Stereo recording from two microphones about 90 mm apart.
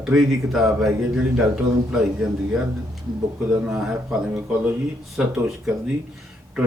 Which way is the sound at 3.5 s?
5° right (ahead or behind).